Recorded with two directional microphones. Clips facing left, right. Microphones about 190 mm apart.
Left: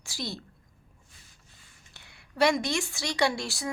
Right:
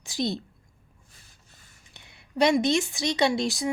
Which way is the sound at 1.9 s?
20° right (ahead or behind).